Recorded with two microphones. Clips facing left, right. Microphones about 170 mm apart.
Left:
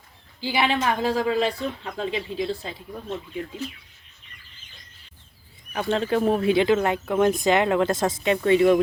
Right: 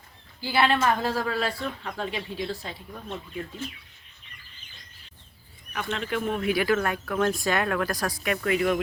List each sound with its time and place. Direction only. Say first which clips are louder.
0.4 s speech: even; 15° left (ahead or behind)
5.7 s speech: left 7 dB; 30° left (ahead or behind)